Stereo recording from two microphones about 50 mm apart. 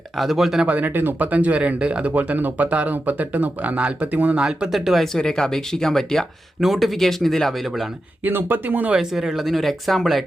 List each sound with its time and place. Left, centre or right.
0.2 s speech: centre
0.7 s speech: right
4.7 s speech: centre
5.0 s speech: centre
8.2 s speech: right
9.0 s speech: centre